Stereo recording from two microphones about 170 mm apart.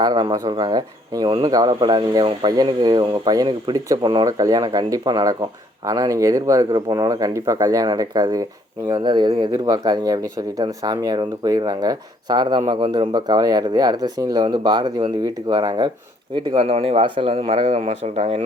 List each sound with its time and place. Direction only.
0.0 s speech: 25° right (ahead or behind)